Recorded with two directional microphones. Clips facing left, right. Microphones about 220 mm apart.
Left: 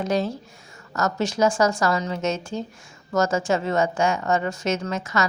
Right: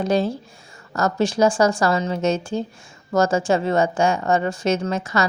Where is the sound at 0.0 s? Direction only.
30° right (ahead or behind).